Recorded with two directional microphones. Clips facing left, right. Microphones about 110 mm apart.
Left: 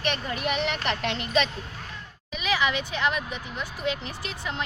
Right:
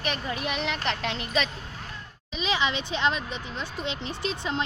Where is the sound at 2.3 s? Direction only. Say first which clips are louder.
Left 1 dB; 25° right (ahead or behind).